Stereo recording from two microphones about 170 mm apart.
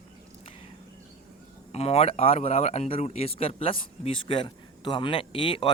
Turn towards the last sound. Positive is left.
turn(degrees=30)  # may be behind; listen again after turning